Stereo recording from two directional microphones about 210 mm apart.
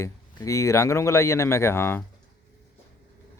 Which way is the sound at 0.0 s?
15° left (ahead or behind).